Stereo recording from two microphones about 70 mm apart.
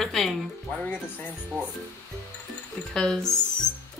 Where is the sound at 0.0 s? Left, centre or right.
Centre.